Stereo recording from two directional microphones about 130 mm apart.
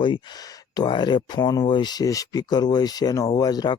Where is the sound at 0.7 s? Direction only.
35° left (ahead or behind).